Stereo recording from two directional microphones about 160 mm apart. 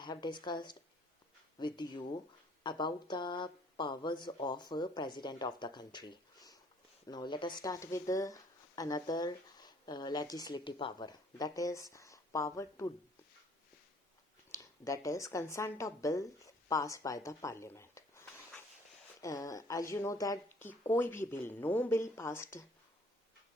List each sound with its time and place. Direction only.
0.0 s speech: 30° left (ahead or behind)
14.5 s speech: 20° left (ahead or behind)
16.6 s a sound: 20° left (ahead or behind)
19.2 s a woman's voice: 20° left (ahead or behind)